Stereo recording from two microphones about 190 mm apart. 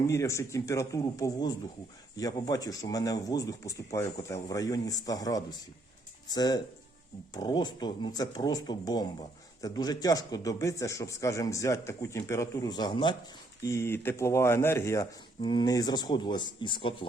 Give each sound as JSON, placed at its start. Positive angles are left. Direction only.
{"t": 0.1, "sound": "speech", "side_deg": 15}